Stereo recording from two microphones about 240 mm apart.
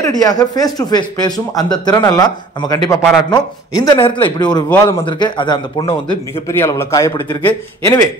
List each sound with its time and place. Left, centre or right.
0.0 s a man's voice: centre